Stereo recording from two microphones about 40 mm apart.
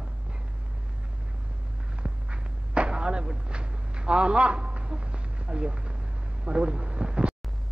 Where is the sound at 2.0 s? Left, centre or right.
Right.